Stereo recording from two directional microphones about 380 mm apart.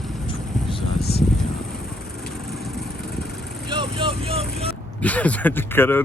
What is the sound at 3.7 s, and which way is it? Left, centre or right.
Speech, centre.